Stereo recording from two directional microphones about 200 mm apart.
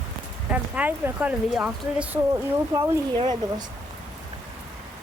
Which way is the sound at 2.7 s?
15° right (ahead or behind).